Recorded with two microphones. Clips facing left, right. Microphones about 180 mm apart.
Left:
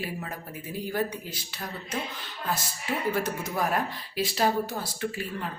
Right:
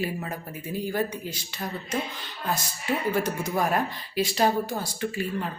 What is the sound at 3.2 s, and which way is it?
Speech, centre (ahead or behind).